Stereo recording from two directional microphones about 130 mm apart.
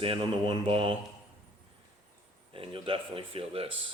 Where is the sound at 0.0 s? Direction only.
45° right (ahead or behind).